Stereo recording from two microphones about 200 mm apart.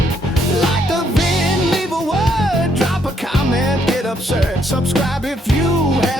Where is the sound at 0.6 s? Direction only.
Centre (ahead or behind).